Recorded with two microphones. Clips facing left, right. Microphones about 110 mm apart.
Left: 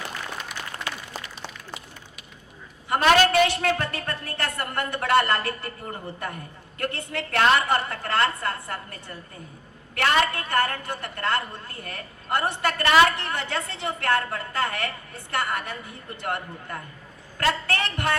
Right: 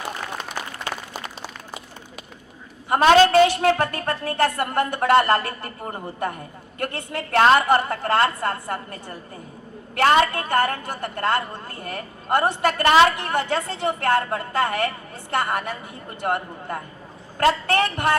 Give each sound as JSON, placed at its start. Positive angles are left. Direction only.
{"t": 2.9, "sound": "a woman's voice", "side_deg": -25}